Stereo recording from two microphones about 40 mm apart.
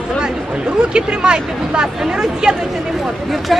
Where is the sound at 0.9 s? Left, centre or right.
Right.